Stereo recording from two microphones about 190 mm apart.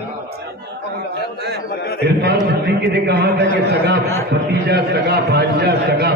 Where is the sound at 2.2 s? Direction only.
60° right (ahead or behind).